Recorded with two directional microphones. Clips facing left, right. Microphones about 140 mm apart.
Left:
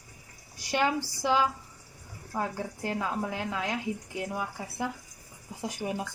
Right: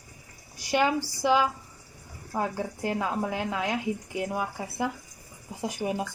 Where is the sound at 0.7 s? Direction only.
10° right (ahead or behind).